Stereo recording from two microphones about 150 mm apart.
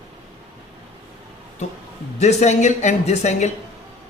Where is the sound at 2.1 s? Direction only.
50° left (ahead or behind).